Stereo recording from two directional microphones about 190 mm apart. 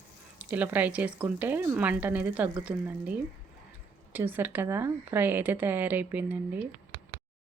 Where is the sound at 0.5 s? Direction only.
10° right (ahead or behind).